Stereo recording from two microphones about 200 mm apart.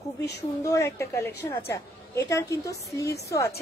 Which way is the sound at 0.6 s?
15° left (ahead or behind).